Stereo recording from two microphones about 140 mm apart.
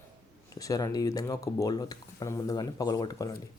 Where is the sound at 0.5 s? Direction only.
25° left (ahead or behind).